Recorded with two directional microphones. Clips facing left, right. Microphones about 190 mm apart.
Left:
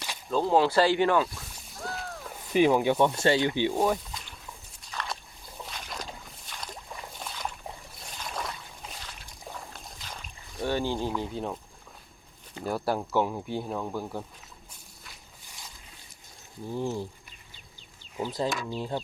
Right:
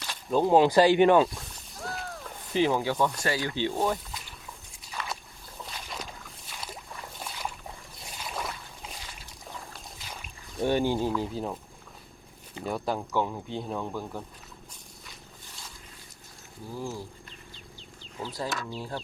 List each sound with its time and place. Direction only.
0.3 s speech: 15° right (ahead or behind)
1.5 s a sound: centre (ahead or behind)
2.6 s speech: 15° left (ahead or behind)
4.8 s walk: 5° right (ahead or behind)
5.6 s a sound: centre (ahead or behind)
6.5 s boat: 5° right (ahead or behind)
8.0 s a sound: 5° right (ahead or behind)
11.2 s speech: 5° right (ahead or behind)
12.5 s speech: centre (ahead or behind)
16.7 s speech: 25° left (ahead or behind)
18.2 s speech: 20° left (ahead or behind)